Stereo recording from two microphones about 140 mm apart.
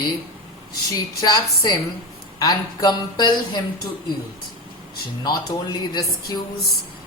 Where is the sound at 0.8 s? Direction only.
25° left (ahead or behind).